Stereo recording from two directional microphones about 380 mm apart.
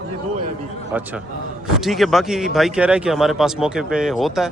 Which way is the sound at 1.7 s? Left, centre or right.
Centre.